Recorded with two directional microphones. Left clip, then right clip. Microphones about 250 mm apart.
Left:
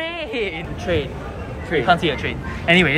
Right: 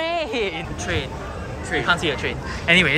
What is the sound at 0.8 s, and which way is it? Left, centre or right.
Speech, centre.